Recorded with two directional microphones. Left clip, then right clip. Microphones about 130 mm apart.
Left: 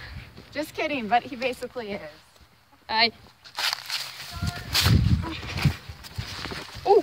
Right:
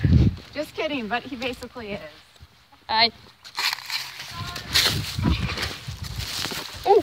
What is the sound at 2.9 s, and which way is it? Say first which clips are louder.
Speech: right 2 dB; 15° left (ahead or behind).